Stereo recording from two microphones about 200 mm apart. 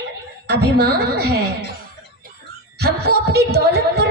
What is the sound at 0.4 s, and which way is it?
Speech, 55° right (ahead or behind).